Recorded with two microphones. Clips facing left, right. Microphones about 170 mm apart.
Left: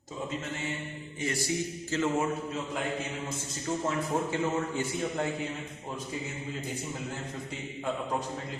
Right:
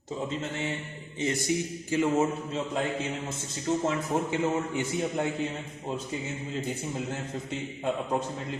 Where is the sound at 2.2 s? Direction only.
25° right (ahead or behind).